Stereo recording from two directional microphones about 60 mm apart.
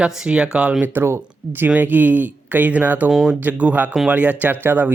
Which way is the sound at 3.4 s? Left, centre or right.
Right.